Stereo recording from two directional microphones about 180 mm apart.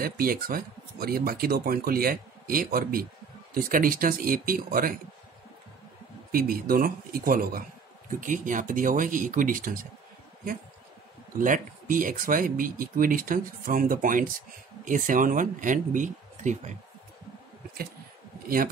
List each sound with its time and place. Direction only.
0.0 s speech: 55° right (ahead or behind)
6.3 s speech: 55° right (ahead or behind)